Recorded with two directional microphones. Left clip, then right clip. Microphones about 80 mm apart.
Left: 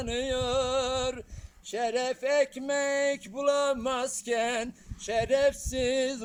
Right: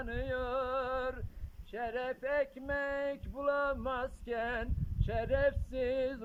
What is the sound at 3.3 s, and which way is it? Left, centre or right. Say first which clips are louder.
Male singing: left 5 dB; left.